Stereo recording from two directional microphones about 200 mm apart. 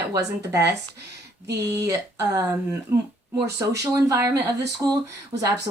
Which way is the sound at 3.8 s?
15° right (ahead or behind).